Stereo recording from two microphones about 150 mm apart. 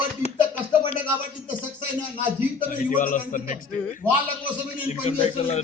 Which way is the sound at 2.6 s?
65° left (ahead or behind).